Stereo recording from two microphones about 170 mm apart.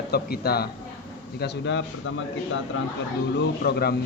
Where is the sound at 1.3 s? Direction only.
85° left.